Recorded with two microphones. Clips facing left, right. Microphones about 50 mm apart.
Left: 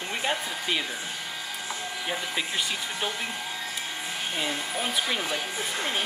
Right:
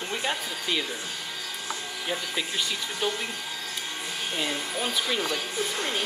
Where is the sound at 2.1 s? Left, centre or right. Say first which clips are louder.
Even; centre.